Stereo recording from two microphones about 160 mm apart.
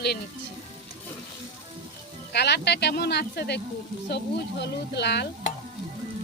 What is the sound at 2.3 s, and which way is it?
Speech, 90° left.